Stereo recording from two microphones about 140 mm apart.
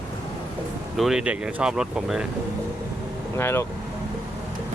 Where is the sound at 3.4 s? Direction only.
15° left (ahead or behind).